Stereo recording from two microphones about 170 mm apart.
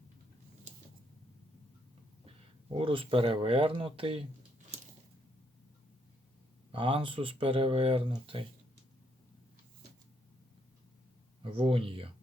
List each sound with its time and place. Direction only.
2.7 s speech: 30° right (ahead or behind)
6.7 s speech: 30° right (ahead or behind)
11.4 s speech: 30° right (ahead or behind)